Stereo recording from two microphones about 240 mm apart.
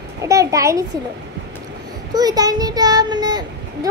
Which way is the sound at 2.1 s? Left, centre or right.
Centre.